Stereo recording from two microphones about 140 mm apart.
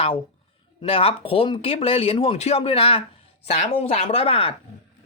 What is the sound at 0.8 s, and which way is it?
Speech, 40° left (ahead or behind).